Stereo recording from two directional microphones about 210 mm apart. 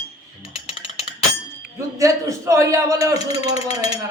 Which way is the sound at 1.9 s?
15° right (ahead or behind).